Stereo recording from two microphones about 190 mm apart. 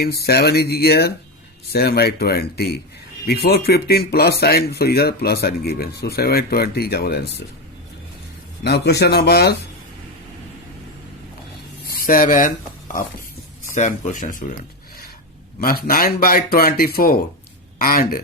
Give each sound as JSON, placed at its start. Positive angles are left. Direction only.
{"t": 0.0, "sound": "speech", "side_deg": 55}
{"t": 8.6, "sound": "speech", "side_deg": 60}
{"t": 11.9, "sound": "speech", "side_deg": 50}
{"t": 15.6, "sound": "speech", "side_deg": 50}